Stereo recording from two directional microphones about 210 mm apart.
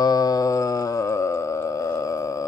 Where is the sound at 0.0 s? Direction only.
15° left (ahead or behind).